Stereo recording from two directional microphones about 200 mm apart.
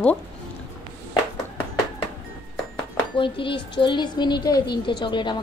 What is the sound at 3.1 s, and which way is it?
A woman's voice, 25° left (ahead or behind).